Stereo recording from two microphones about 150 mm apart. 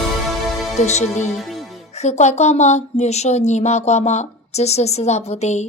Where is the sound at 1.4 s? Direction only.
Centre (ahead or behind).